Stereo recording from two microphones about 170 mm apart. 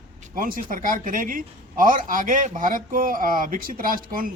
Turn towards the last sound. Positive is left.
turn(degrees=-55)  # may be behind; listen again after turning